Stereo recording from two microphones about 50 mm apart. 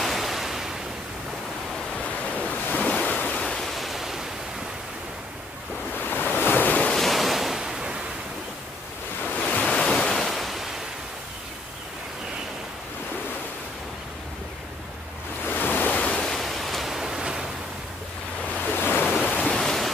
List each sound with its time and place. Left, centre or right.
0.0 s waves: centre
2.7 s waves: left
3.2 s waves: left
3.4 s waves: centre
5.9 s waves: left
7.0 s waves: centre
9.2 s waves: left; by 10.7 s centre
15.4 s waves: left
16.0 s waves: centre
16.3 s pink noise: centre
18.8 s waves: left
19.6 s waves: centre